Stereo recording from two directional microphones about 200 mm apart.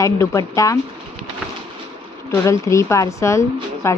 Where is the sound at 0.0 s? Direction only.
15° left (ahead or behind).